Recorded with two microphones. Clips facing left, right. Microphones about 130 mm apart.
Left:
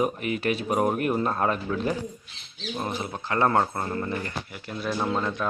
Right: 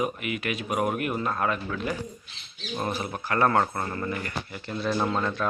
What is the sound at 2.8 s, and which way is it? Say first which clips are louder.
Speech: right 2 dB; 20° left (ahead or behind).